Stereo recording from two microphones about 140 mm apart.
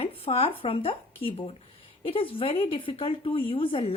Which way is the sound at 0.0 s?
45° left (ahead or behind).